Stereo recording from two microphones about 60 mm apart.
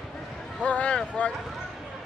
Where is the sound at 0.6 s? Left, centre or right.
Left.